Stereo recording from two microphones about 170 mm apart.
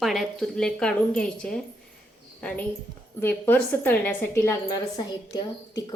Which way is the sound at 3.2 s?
10° left (ahead or behind).